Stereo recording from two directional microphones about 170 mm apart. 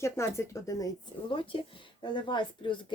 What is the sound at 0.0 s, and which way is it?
Speech, 15° left (ahead or behind).